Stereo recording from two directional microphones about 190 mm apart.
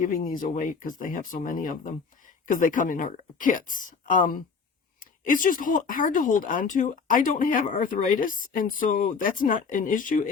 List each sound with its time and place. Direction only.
0.0 s speech: 45° left (ahead or behind)